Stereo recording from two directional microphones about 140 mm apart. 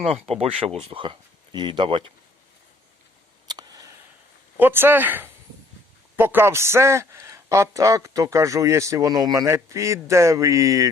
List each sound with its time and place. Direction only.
0.0 s speech: 45° right (ahead or behind)
3.5 s a sound: 25° right (ahead or behind)
4.5 s a man's voice: 15° right (ahead or behind)